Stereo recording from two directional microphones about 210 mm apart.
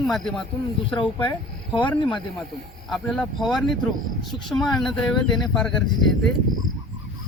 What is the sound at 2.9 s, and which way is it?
Speech, centre (ahead or behind).